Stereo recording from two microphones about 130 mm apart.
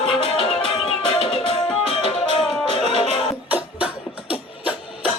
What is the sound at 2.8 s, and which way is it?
Music, 55° right (ahead or behind).